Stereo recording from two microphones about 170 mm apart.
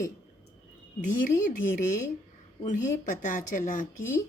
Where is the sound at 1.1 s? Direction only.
55° left (ahead or behind).